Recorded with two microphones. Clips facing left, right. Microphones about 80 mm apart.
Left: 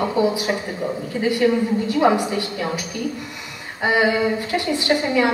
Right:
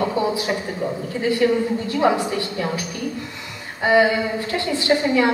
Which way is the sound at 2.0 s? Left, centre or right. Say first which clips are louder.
Left 1 dB; left.